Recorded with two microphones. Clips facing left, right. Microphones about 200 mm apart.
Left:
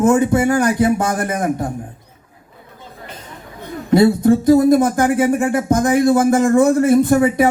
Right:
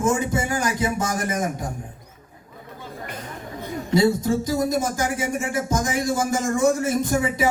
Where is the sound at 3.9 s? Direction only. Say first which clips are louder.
Left 7 dB; 60° left (ahead or behind).